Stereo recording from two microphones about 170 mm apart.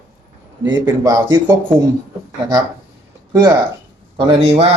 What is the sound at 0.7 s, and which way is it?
A man's voice, 20° right (ahead or behind).